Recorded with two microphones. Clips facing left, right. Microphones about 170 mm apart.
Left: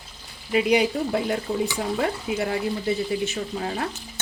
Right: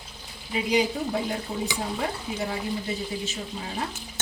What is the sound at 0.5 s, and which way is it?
Speech, 70° left (ahead or behind).